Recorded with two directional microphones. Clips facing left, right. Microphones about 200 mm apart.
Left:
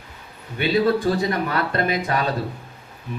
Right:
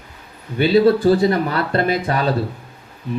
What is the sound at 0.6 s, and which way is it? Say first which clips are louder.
Speech: right 6 dB; 30° right (ahead or behind).